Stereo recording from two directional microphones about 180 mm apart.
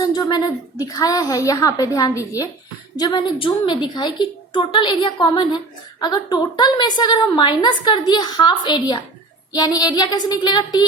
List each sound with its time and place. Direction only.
0.0 s a woman's voice: 25° left (ahead or behind)